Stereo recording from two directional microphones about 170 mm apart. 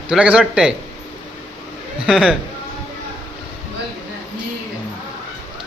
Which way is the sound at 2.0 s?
5° right (ahead or behind).